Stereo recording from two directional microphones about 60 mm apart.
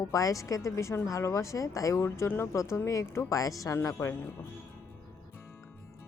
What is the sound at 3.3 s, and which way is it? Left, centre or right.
A woman's voice, left.